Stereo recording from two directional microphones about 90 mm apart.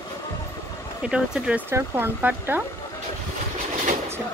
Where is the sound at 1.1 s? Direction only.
10° right (ahead or behind).